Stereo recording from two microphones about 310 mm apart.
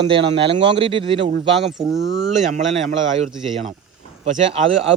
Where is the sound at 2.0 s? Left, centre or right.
Right.